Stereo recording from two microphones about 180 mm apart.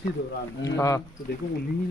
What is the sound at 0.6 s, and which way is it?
Speech, 20° left (ahead or behind).